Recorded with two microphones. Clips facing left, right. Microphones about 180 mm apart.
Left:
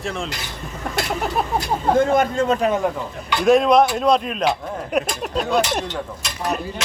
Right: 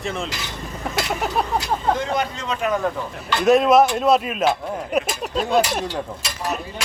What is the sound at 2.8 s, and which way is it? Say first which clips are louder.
Speech: left 1 dB; 15° left (ahead or behind).